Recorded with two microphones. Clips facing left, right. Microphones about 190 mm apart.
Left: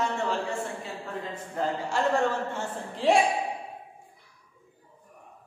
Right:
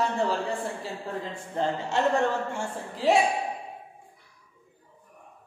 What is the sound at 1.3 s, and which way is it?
Speech, 25° right (ahead or behind).